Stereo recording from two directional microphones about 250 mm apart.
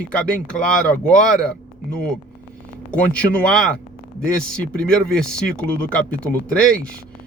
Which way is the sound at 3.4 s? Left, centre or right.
Centre.